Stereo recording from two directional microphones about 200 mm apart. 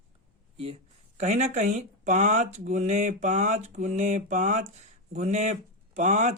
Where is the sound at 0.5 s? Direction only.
30° right (ahead or behind).